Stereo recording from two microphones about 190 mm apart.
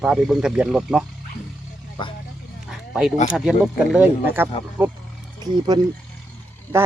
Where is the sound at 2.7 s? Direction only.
5° right (ahead or behind).